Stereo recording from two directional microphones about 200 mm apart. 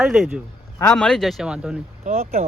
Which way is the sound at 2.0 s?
35° right (ahead or behind).